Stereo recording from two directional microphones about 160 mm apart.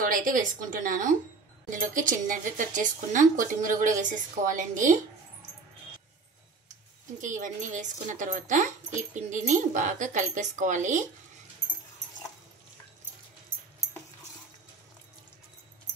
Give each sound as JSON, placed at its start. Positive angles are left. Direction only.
{"t": 0.0, "sound": "speech", "side_deg": -60}
{"t": 7.2, "sound": "speech", "side_deg": -55}